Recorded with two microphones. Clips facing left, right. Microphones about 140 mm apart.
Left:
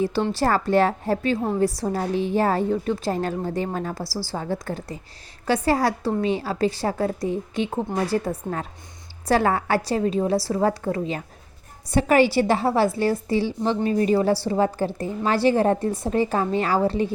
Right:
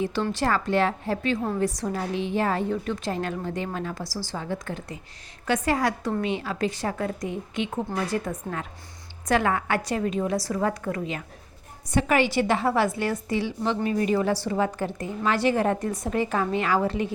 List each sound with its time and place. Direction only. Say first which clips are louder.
0.0 s a woman's voice: left 4 dB; 35° left (ahead or behind)